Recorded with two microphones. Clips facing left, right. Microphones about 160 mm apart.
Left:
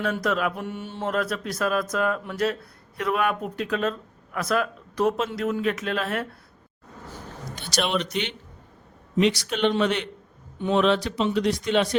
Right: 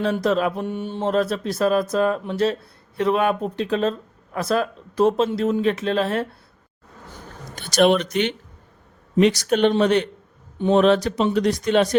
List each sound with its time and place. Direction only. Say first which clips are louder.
0.0 s speech: right 5 dB; 30° right (ahead or behind)
7.5 s speech: right 9 dB; 50° right (ahead or behind)